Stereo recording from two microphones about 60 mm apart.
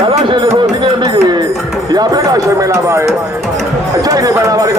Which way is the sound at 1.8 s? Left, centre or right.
Right.